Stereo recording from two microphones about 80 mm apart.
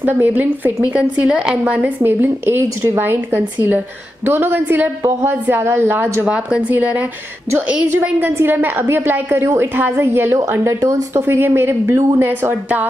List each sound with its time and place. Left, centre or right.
0.0 s a woman's voice: right
6.2 s speech: centre
8.3 s a woman's voice: right